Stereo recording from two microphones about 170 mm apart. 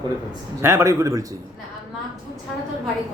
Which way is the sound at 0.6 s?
15° right (ahead or behind).